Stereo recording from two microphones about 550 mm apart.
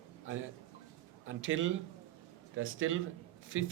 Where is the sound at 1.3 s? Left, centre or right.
Right.